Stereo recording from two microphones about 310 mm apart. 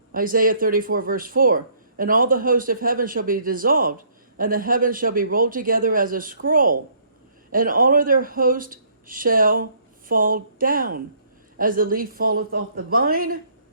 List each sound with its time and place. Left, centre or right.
0.1 s speech: right